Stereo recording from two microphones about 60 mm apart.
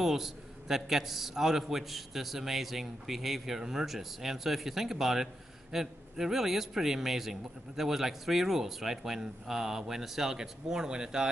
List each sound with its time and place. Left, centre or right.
0.0 s a man's voice: centre